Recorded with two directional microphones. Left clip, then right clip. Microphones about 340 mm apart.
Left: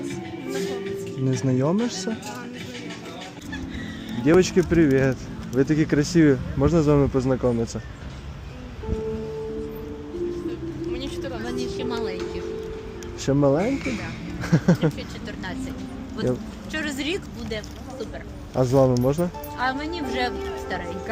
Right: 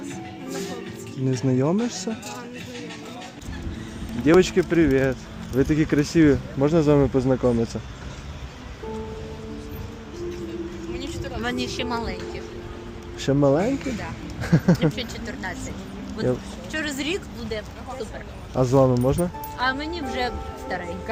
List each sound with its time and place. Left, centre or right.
1.3 s speech: centre
4.3 s speech: centre
10.9 s vehicle: centre
11.4 s a sound: right
13.2 s speech: centre
16.7 s speech: centre